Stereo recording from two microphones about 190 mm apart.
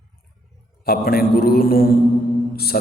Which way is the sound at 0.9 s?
50° left (ahead or behind).